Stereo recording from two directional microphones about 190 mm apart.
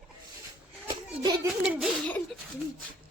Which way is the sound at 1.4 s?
5° right (ahead or behind).